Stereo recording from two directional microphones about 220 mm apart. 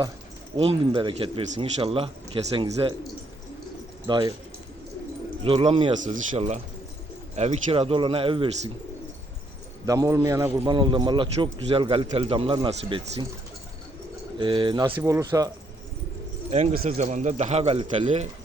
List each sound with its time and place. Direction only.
0.5 s speech: 25° right (ahead or behind)
4.0 s speech: 20° right (ahead or behind)
5.4 s speech: 25° right (ahead or behind)
9.8 s a man's voice: 15° right (ahead or behind)
14.3 s speech: 20° right (ahead or behind)
16.5 s speech: 35° right (ahead or behind)